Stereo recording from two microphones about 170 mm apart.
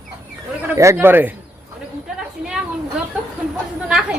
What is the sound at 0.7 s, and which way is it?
Speech, 15° right (ahead or behind).